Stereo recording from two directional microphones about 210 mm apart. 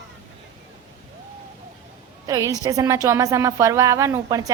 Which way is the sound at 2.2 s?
15° right (ahead or behind).